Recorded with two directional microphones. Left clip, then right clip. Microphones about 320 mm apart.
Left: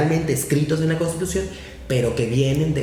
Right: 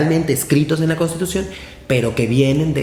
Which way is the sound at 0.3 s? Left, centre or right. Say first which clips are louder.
Right 4 dB; right.